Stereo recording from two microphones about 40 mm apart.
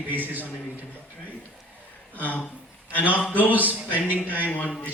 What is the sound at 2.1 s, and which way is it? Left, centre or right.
Speech, left.